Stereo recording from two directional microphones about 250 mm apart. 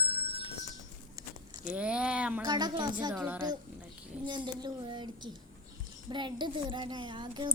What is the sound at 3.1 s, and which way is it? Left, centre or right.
Speech, centre.